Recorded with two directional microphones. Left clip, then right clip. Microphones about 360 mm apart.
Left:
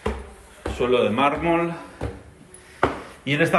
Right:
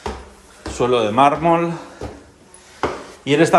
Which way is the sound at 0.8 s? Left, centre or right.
Centre.